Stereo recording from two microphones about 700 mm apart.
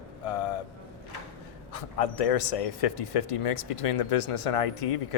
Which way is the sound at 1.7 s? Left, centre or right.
Left.